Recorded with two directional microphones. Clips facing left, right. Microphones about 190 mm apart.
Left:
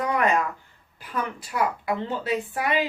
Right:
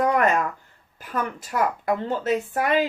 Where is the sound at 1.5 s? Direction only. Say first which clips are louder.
Right 2 dB; 45° right (ahead or behind).